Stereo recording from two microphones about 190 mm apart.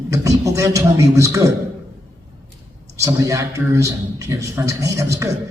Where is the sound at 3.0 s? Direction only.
15° right (ahead or behind).